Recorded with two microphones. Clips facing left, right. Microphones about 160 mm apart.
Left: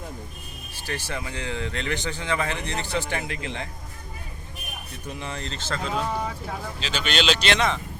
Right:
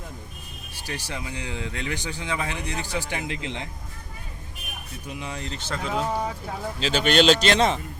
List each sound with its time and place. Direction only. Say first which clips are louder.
0.8 s speech: left 2 dB; 15° right (ahead or behind)
5.2 s speech: even; 15° right (ahead or behind)
6.7 s speech: right 7 dB; 50° right (ahead or behind)